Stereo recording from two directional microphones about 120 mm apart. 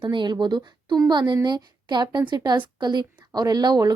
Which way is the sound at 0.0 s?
40° right (ahead or behind).